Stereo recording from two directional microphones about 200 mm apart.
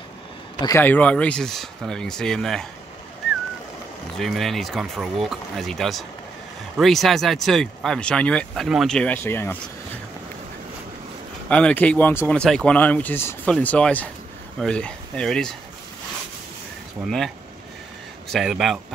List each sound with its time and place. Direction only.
0.6 s speech: 15° left (ahead or behind)
4.2 s speech: centre (ahead or behind)
11.4 s speech: 5° left (ahead or behind)
17.0 s speech: centre (ahead or behind)
18.3 s speech: centre (ahead or behind)